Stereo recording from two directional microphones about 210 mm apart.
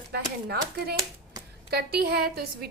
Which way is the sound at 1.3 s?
20° right (ahead or behind).